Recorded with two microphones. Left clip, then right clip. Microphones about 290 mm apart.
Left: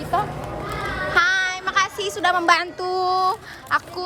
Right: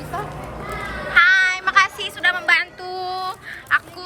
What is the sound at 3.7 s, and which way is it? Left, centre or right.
Speech, centre.